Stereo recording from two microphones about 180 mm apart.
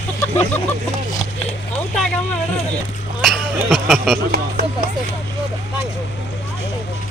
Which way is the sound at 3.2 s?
Centre (ahead or behind).